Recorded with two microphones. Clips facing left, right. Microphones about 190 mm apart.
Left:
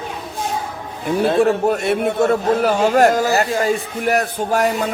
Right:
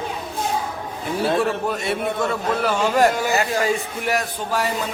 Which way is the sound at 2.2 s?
45° left (ahead or behind).